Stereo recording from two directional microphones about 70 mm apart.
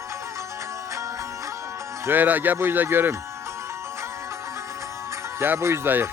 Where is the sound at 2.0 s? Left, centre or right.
Right.